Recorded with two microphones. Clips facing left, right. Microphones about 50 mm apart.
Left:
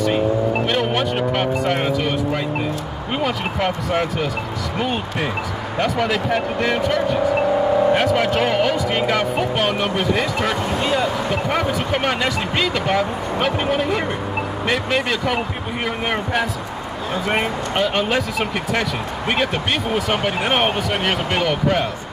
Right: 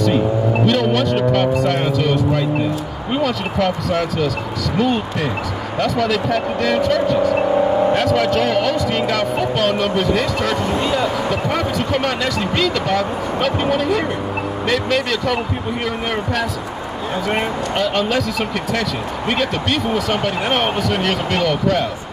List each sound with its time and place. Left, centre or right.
0.7 s music: left
1.7 s speech: centre
17.3 s speech: centre